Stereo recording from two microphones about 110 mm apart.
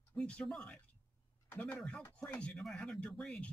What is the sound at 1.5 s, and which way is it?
Speech, 20° left (ahead or behind).